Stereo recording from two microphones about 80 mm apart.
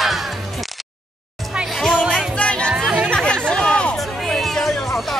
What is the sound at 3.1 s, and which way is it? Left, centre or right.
Chatter, centre.